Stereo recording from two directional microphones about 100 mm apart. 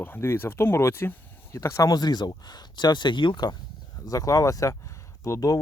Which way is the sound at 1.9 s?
45° left (ahead or behind).